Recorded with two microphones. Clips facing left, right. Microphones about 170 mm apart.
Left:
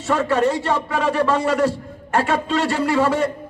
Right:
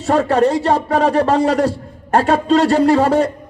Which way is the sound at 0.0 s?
40° right (ahead or behind).